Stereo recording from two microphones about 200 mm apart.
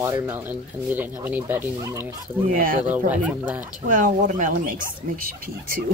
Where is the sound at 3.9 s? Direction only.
40° right (ahead or behind).